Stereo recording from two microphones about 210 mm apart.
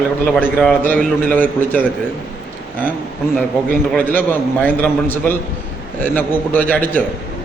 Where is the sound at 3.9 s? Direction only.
10° left (ahead or behind).